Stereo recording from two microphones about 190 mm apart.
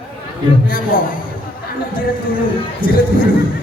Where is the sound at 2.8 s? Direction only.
50° left (ahead or behind).